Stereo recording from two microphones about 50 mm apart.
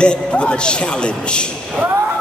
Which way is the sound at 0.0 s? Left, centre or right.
Left.